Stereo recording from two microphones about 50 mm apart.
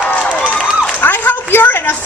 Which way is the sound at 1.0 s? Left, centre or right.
Left.